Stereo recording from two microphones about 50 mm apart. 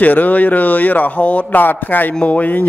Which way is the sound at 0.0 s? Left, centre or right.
Left.